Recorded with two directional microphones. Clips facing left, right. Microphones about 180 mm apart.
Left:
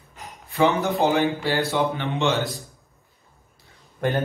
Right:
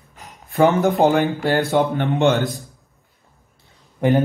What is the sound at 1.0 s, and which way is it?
Speech, 50° right (ahead or behind).